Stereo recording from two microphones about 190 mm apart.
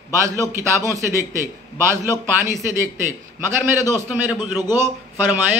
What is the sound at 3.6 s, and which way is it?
Speech, 15° right (ahead or behind).